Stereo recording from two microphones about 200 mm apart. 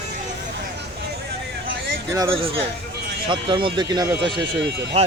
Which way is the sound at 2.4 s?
30° right (ahead or behind).